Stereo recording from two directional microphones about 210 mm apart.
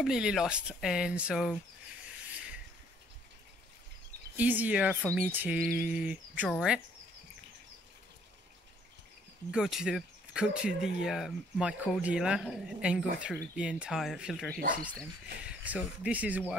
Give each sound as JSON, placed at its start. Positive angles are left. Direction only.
{"t": 0.0, "sound": "speech", "side_deg": -5}
{"t": 2.0, "sound": "rub", "side_deg": -5}
{"t": 4.4, "sound": "speech", "side_deg": -10}
{"t": 9.5, "sound": "speech", "side_deg": 0}